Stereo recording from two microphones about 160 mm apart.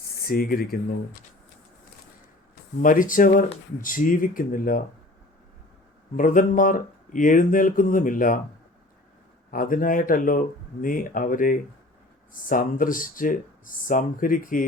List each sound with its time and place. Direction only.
0.3 s speech: 65° left (ahead or behind)
2.8 s speech: 55° left (ahead or behind)
6.1 s speech: 55° left (ahead or behind)
9.5 s speech: 60° left (ahead or behind)